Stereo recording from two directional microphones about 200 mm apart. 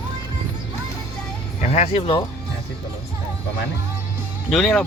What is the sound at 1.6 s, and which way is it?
Speech, 35° left (ahead or behind).